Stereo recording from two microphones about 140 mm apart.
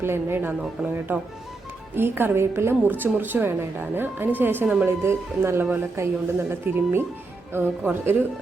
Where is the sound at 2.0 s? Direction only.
15° right (ahead or behind).